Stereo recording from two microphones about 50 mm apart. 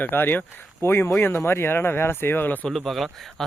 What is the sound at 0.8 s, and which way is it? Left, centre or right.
Speech, left.